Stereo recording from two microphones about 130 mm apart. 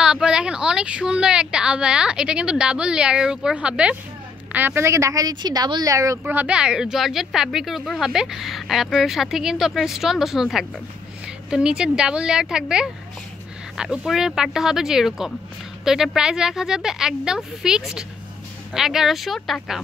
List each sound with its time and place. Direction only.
0.0 s a woman's voice: 5° right (ahead or behind); by 6.3 s 25° right (ahead or behind)
6.3 s speech: 10° right (ahead or behind)